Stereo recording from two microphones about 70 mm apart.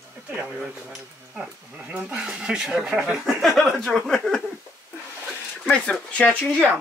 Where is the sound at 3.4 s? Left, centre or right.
Centre.